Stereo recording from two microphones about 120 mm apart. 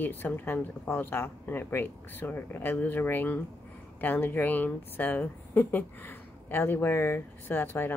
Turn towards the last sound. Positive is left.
turn(degrees=15)  # may be behind; listen again after turning